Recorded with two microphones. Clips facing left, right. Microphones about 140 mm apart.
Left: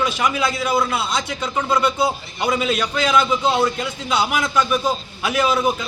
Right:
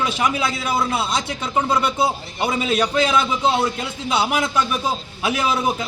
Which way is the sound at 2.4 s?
30° right (ahead or behind).